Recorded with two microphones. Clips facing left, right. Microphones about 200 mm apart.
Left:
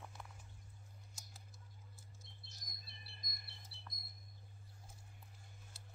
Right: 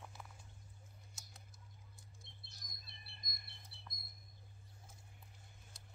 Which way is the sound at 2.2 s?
35° left (ahead or behind).